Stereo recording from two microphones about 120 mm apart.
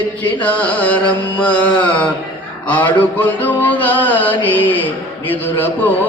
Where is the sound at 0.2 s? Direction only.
10° left (ahead or behind).